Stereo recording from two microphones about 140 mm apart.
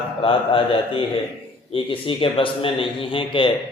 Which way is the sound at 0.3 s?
40° left (ahead or behind).